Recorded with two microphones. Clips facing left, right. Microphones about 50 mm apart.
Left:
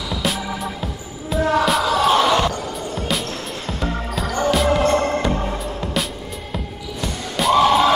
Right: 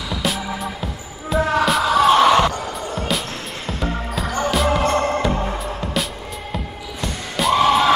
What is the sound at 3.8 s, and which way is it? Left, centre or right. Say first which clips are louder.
Music: even; centre.